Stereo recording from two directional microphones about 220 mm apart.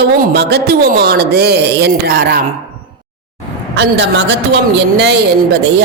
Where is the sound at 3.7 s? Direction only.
55° right (ahead or behind).